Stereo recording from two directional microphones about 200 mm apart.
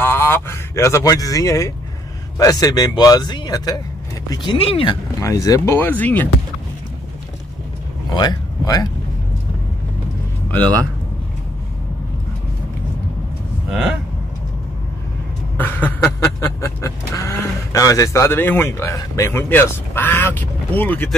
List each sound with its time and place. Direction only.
0.0 s speech: 10° left (ahead or behind); by 4.9 s 25° left (ahead or behind)
5.2 s speech: 15° left (ahead or behind)
8.2 s speech: 20° left (ahead or behind)
13.7 s speech: 5° right (ahead or behind)
15.5 s a sound: 10° left (ahead or behind)